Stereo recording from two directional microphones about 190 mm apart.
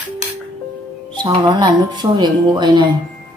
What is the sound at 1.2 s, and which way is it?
Speech, 20° right (ahead or behind).